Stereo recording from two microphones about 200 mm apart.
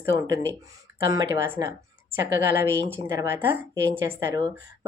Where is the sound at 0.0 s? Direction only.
15° right (ahead or behind).